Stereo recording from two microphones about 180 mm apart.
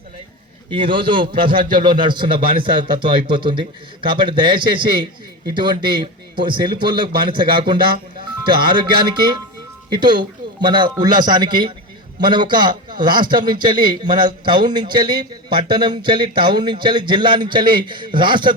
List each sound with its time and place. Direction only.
0.7 s a man's voice: 25° right (ahead or behind)